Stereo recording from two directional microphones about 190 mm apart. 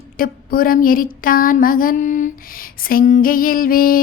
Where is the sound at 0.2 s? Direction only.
50° left (ahead or behind).